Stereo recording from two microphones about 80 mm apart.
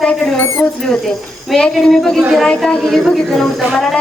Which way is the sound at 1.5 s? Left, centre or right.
Centre.